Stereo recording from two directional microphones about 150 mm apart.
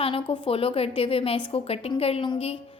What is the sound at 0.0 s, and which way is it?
A woman's voice, 40° left (ahead or behind).